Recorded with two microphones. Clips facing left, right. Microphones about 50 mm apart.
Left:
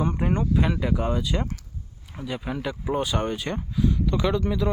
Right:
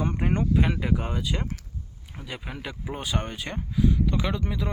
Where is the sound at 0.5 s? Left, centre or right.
Right.